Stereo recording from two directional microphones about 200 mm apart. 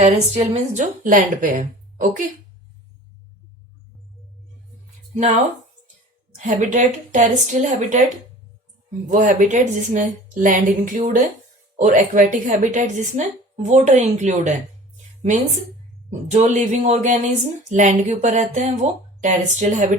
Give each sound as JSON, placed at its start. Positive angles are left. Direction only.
{"t": 0.0, "sound": "speech", "side_deg": -35}
{"t": 6.4, "sound": "speech", "side_deg": -40}
{"t": 16.0, "sound": "speech", "side_deg": -35}